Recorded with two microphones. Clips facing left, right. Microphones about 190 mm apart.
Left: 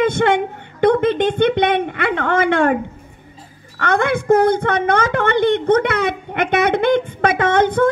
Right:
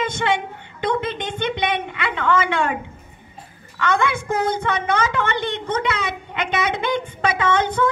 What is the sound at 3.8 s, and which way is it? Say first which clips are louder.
A woman's voice: left 3 dB; 55° left (ahead or behind).